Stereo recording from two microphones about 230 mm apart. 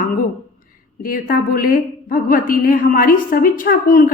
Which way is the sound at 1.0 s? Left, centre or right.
Left.